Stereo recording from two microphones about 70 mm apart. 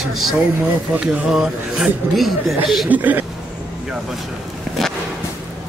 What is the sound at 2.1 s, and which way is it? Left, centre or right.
Speech, centre.